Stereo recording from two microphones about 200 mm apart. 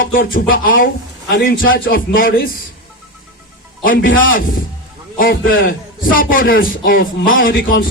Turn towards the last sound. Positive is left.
turn(degrees=45)  # may be behind; listen again after turning